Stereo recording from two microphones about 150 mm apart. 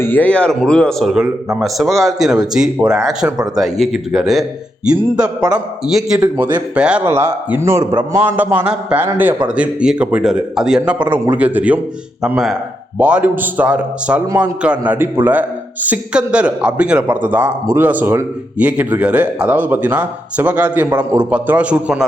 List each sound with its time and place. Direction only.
0.0 s speech: 10° left (ahead or behind)
6.1 s a man's voice: 20° right (ahead or behind)
6.7 s a man's voice: 5° right (ahead or behind)